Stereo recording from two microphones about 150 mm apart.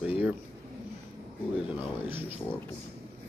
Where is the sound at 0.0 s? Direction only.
10° right (ahead or behind).